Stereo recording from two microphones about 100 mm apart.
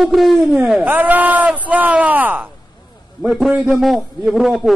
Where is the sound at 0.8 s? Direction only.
20° right (ahead or behind).